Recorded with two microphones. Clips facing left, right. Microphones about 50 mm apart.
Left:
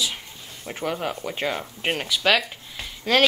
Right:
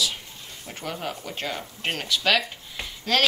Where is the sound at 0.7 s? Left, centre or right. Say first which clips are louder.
Left 5 dB; centre.